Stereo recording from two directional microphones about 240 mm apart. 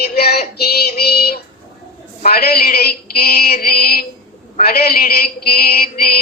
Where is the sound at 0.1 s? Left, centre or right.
Left.